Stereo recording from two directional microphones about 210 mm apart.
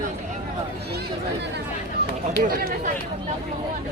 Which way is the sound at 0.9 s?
50° right (ahead or behind).